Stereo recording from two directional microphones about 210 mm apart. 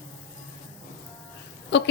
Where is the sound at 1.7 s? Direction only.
55° left (ahead or behind).